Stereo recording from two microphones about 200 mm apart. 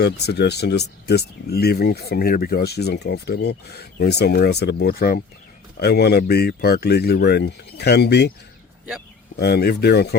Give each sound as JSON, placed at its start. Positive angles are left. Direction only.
{"t": 0.0, "sound": "speech", "side_deg": 55}
{"t": 9.4, "sound": "speech", "side_deg": 55}